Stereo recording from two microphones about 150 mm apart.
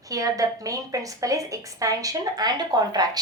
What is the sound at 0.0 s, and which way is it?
A woman's voice, 25° right (ahead or behind).